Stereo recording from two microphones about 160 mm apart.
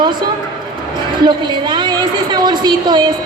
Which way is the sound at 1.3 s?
30° right (ahead or behind).